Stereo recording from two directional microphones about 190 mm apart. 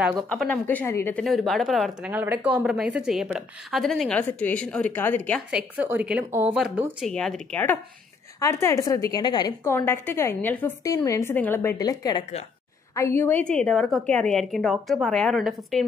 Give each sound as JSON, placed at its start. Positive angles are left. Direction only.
{"t": 0.3, "sound": "a woman's voice", "side_deg": 5}
{"t": 1.2, "sound": "speech", "side_deg": 0}
{"t": 5.5, "sound": "a woman's voice", "side_deg": -5}